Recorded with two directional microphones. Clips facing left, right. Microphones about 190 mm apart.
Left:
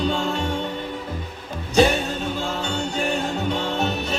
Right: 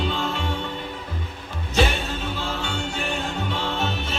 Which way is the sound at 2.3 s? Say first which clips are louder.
Left 3 dB; 40° left (ahead or behind).